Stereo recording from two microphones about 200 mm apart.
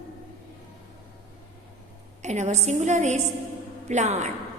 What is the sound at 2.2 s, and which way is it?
A woman's voice, 35° right (ahead or behind).